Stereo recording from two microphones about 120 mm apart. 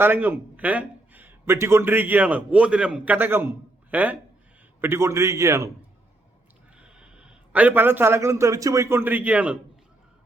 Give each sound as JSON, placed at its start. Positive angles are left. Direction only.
{"t": 0.0, "sound": "a man's voice", "side_deg": -15}
{"t": 6.7, "sound": "a man's voice", "side_deg": -10}